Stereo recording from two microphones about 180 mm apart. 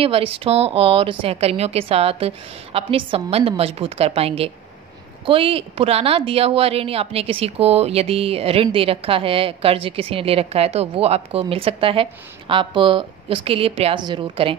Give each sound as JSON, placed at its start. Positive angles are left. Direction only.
{"t": 0.0, "sound": "speech", "side_deg": -30}